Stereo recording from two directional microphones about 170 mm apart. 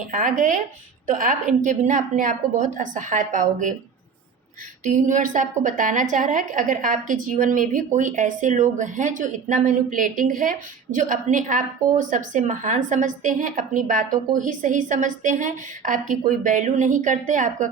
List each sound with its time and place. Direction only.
0.1 s speech: 50° right (ahead or behind)
4.8 s speech: 45° right (ahead or behind)